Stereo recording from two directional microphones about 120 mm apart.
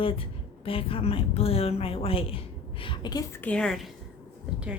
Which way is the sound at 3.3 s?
15° left (ahead or behind).